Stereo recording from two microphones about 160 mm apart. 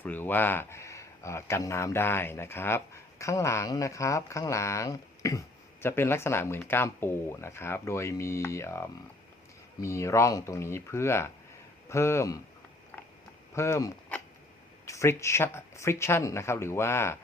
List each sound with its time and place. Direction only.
0.0 s speech: 10° left (ahead or behind)
13.6 s speech: 20° left (ahead or behind)